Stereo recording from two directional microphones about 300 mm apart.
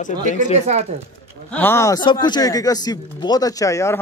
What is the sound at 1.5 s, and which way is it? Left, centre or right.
A man's voice, centre.